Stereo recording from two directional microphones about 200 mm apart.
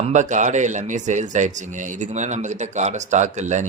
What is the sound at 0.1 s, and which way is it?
Speech, 35° right (ahead or behind).